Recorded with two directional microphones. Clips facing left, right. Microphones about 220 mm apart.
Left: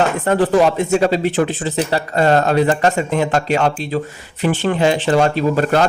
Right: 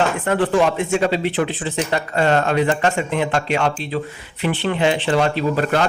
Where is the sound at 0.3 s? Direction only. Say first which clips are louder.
Left 4 dB; 40° left (ahead or behind).